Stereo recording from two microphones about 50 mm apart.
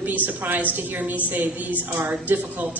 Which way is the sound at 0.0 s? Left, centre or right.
Right.